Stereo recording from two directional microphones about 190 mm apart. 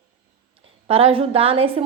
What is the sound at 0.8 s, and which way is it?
A woman's voice, 30° right (ahead or behind).